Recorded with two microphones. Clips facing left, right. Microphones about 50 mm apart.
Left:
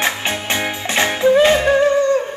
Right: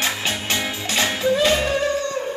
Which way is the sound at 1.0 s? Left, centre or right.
Left.